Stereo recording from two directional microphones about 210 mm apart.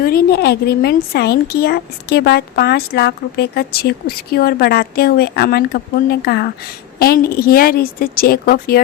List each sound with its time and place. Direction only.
0.0 s speech: 45° left (ahead or behind)